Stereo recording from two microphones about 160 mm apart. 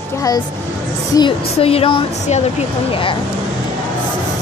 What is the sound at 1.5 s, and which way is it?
A woman's voice, 35° left (ahead or behind).